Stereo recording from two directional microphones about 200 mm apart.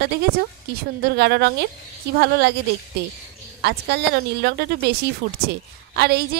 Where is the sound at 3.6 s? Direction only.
55° right (ahead or behind).